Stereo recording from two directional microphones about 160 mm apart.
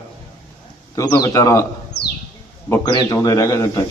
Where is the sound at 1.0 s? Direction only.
20° left (ahead or behind).